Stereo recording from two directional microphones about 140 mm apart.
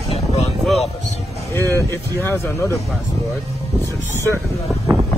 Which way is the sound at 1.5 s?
20° left (ahead or behind).